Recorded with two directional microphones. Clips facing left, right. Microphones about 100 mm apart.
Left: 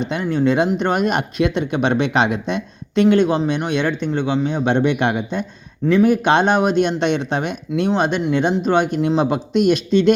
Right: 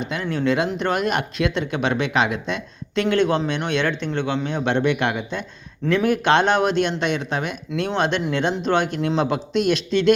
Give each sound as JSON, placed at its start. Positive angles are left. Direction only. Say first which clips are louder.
{"t": 0.1, "sound": "speech", "louder": "left 3 dB", "side_deg": 20}
{"t": 5.8, "sound": "speech", "louder": "left 5 dB", "side_deg": 10}